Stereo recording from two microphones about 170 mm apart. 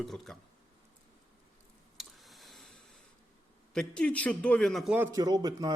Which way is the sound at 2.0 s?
Centre (ahead or behind).